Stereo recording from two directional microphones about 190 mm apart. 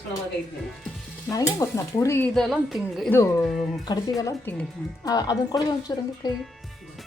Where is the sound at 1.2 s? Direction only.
15° left (ahead or behind).